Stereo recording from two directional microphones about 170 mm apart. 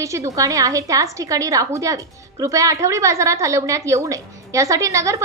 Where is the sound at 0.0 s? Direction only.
20° right (ahead or behind).